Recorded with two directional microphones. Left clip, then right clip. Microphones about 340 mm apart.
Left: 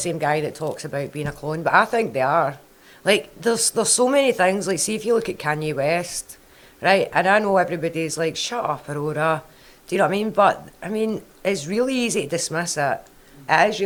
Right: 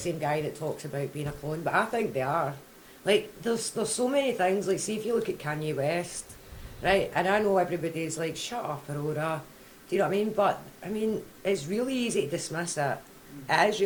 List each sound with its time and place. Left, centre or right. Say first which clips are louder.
0.0 s a man's voice: left 8 dB; left